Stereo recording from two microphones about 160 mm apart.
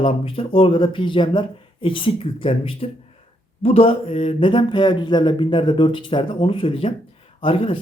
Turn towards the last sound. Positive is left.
turn(degrees=35)  # may be behind; listen again after turning